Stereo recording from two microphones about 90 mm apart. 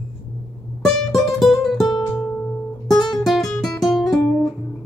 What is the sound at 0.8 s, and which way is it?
Music, centre (ahead or behind).